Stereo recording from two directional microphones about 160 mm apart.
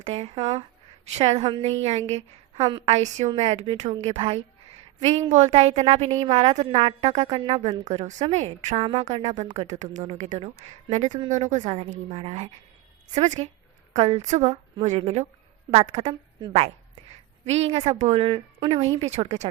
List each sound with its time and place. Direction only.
0.0 s a woman's voice: 40° right (ahead or behind)
1.5 s a woman's voice: 30° right (ahead or behind)
1.8 s a woman's voice: 45° right (ahead or behind)